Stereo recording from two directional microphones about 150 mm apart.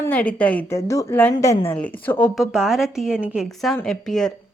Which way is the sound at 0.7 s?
20° left (ahead or behind).